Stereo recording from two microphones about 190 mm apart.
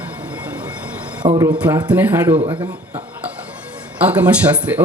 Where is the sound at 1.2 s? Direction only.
30° right (ahead or behind).